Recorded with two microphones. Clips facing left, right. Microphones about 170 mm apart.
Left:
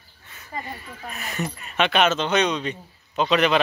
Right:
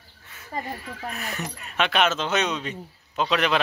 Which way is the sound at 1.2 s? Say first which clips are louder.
Left 3 dB; centre (ahead or behind).